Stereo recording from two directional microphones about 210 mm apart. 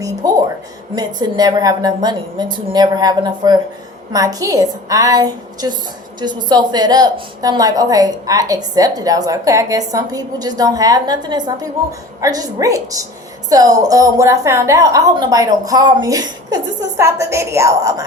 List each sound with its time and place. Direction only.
0.2 s a woman's voice: 15° right (ahead or behind)